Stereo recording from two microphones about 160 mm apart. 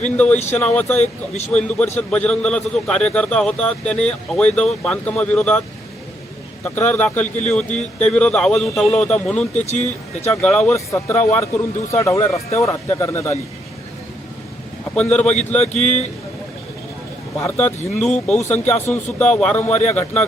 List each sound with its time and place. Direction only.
0.0 s a man's voice: 10° left (ahead or behind)
6.7 s a man's voice: 10° left (ahead or behind)
9.6 s speech: 45° left (ahead or behind)
10.4 s a man's voice: 5° left (ahead or behind)
14.9 s a man's voice: 5° left (ahead or behind)
15.2 s speech: 45° left (ahead or behind)
17.4 s a man's voice: 15° left (ahead or behind)